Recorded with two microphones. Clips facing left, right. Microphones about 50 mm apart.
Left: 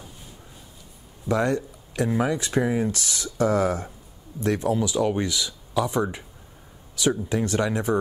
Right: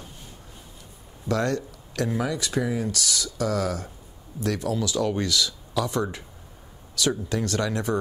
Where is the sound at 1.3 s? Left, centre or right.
Centre.